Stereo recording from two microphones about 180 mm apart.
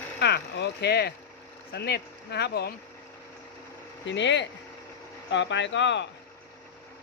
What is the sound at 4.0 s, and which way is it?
Speech, 80° left.